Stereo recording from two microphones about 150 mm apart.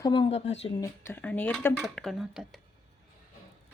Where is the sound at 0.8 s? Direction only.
15° left (ahead or behind).